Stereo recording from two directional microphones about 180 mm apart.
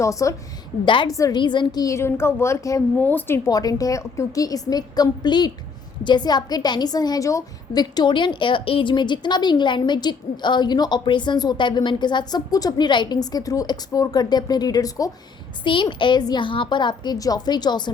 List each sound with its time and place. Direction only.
0.0 s a woman's voice: 15° left (ahead or behind)